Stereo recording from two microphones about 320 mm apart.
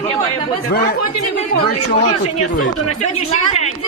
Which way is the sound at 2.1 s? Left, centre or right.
Left.